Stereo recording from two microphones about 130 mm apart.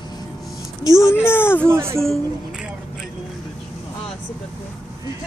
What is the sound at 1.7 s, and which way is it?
Speech, 20° right (ahead or behind).